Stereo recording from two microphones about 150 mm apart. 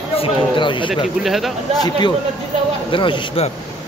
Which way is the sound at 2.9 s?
35° left (ahead or behind).